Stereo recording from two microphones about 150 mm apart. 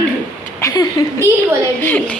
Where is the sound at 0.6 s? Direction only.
25° left (ahead or behind).